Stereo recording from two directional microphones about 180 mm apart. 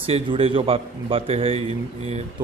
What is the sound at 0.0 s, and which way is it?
A man's voice, 30° right (ahead or behind).